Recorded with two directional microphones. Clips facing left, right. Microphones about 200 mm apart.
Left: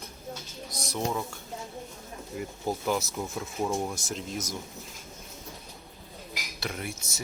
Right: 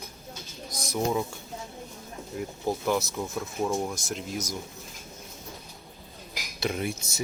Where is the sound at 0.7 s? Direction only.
Centre (ahead or behind).